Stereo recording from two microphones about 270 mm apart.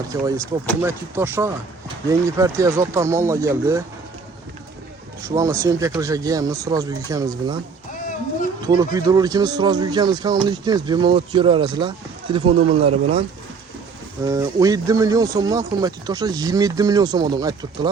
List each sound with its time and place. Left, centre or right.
0.1 s speech: centre
5.2 s speech: centre
8.6 s speech: centre